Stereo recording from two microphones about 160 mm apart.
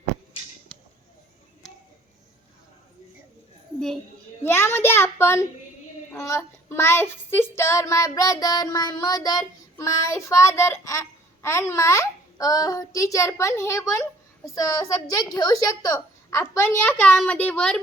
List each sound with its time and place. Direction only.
0.7 s a sound: 5° left (ahead or behind)
4.4 s a child's voice: 15° left (ahead or behind)
6.1 s child singing: 15° left (ahead or behind)
15.4 s a child's voice: 25° left (ahead or behind); by 17.7 s 10° left (ahead or behind)